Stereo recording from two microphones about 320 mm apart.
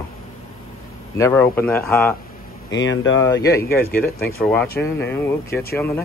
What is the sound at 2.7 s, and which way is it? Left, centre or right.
Speech, left.